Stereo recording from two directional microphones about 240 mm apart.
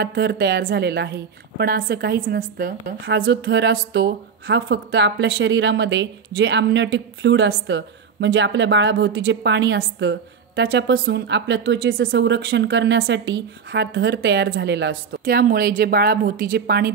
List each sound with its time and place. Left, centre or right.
0.0 s a woman's voice: right